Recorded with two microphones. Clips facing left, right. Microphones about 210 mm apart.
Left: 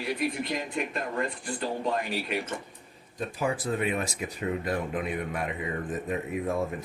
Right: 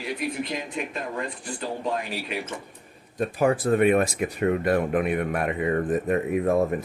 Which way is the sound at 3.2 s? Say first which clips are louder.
Right 8 dB; 60° right (ahead or behind).